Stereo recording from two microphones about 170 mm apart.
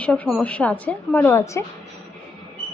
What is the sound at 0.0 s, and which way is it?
A woman's voice, 5° left (ahead or behind).